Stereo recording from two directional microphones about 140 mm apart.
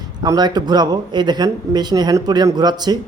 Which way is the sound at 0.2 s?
30° right (ahead or behind).